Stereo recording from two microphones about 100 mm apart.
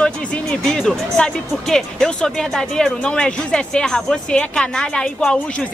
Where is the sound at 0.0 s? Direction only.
10° left (ahead or behind).